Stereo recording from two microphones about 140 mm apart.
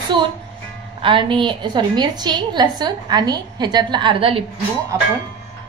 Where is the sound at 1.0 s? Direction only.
35° right (ahead or behind).